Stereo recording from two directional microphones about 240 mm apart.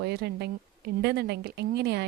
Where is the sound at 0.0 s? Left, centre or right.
Right.